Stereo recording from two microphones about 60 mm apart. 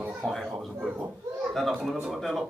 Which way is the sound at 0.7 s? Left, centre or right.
Centre.